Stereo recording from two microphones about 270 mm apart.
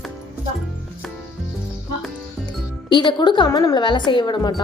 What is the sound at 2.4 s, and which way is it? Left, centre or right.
Speech, centre.